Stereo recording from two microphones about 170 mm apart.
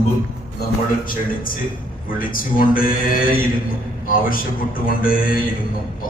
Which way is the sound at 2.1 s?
55° left (ahead or behind).